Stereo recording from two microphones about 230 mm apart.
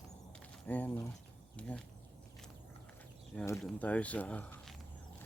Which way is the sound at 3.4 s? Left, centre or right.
Centre.